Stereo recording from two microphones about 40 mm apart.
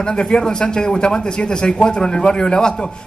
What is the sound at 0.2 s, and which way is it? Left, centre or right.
A man's voice, left.